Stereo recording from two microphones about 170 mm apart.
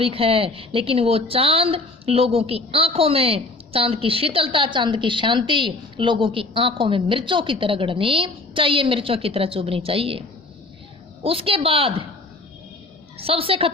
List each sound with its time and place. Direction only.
0.0 s a woman's voice: 35° right (ahead or behind)
13.1 s a woman's voice: 35° right (ahead or behind)